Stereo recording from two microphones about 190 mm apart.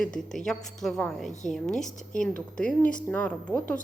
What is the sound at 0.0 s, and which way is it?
A woman's voice, 5° left (ahead or behind).